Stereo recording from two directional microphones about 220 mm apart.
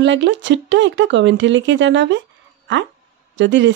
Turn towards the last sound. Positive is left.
turn(degrees=-55)  # may be behind; listen again after turning